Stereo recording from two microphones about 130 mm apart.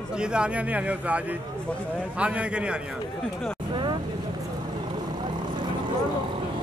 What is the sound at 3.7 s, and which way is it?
Vehicle, 35° right (ahead or behind).